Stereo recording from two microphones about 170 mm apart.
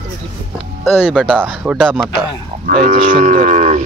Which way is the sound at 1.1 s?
5° right (ahead or behind).